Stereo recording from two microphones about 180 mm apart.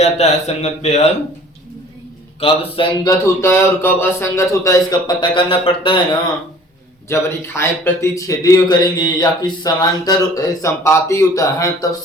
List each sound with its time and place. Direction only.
0.0 s a man's voice: 35° left (ahead or behind)
2.4 s a man's voice: 30° left (ahead or behind)
3.1 s a man's voice: 15° left (ahead or behind)
7.1 s a man's voice: 15° left (ahead or behind)